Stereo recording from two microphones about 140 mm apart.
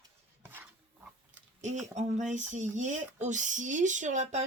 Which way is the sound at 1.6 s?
60° right (ahead or behind).